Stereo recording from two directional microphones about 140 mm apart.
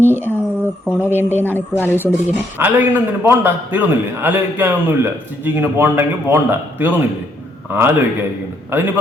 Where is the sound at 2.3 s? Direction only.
15° right (ahead or behind).